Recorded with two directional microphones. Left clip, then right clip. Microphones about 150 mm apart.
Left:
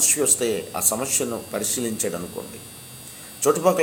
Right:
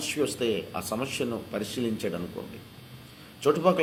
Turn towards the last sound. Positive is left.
turn(degrees=-20)  # may be behind; listen again after turning